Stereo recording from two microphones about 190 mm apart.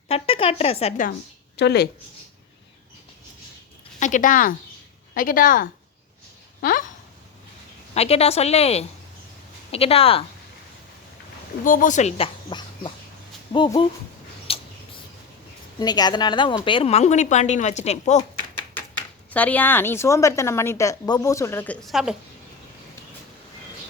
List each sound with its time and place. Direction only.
0.1 s speech: 30° left (ahead or behind)
1.5 s speech: 60° left (ahead or behind)
4.0 s speech: 40° left (ahead or behind)
7.9 s speech: 30° left (ahead or behind)
11.6 s speech: 45° left (ahead or behind); by 13.8 s 25° left (ahead or behind)
14.5 s a sound: 30° left (ahead or behind)
15.8 s speech: 20° left (ahead or behind); by 18.2 s 35° left (ahead or behind)
18.2 s speech: 10° left (ahead or behind)